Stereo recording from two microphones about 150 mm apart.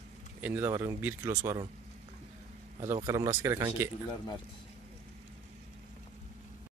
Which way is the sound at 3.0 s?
25° right (ahead or behind).